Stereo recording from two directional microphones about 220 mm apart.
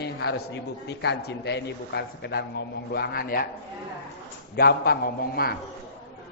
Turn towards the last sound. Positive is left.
turn(degrees=45)  # may be behind; listen again after turning